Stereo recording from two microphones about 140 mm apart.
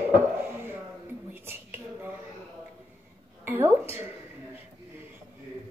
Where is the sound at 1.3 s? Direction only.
15° right (ahead or behind).